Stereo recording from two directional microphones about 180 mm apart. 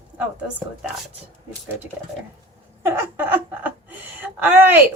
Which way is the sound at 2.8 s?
15° right (ahead or behind).